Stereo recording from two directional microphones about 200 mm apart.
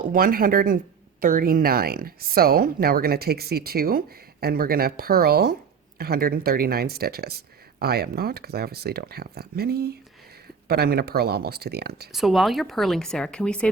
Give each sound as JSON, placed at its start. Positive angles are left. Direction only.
{"t": 0.1, "sound": "speech", "side_deg": -45}
{"t": 12.1, "sound": "speech", "side_deg": 0}